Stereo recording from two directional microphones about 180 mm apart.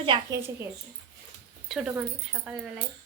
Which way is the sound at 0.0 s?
30° right (ahead or behind).